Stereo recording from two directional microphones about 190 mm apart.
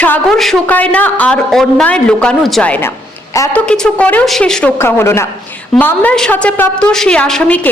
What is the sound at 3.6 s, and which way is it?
A woman's voice, 5° left (ahead or behind).